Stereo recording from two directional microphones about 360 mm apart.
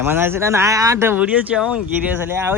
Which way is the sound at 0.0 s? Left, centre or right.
Centre.